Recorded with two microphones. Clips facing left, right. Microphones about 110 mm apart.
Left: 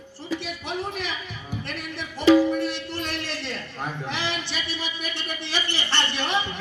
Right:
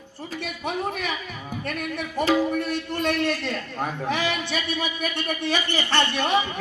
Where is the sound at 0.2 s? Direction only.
50° right (ahead or behind).